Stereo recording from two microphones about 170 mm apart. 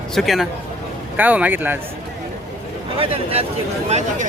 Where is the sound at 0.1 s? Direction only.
Centre (ahead or behind).